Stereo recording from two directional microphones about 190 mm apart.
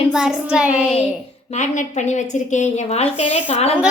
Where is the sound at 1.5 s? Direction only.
40° left (ahead or behind).